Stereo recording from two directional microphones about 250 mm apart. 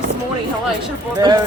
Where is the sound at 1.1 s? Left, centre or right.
Centre.